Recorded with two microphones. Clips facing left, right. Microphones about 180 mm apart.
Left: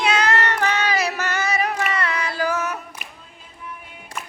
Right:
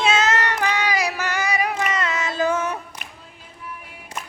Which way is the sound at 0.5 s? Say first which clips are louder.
Left 1 dB; 15° right (ahead or behind).